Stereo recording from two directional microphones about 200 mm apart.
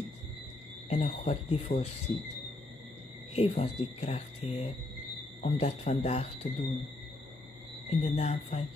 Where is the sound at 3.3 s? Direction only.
35° left (ahead or behind).